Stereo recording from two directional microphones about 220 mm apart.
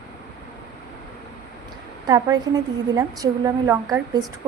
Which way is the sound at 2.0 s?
15° right (ahead or behind).